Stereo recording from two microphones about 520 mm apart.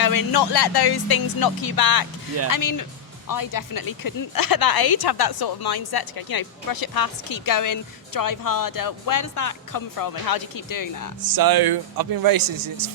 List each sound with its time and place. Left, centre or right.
0.0 s speech: left
11.3 s speech: right